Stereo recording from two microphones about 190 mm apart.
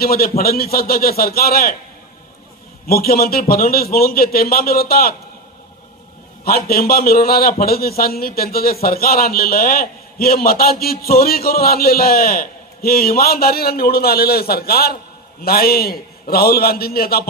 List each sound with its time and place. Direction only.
0.0 s a man's voice: 50° left (ahead or behind)
2.9 s a man's voice: 55° left (ahead or behind)
6.4 s a man's voice: 55° left (ahead or behind)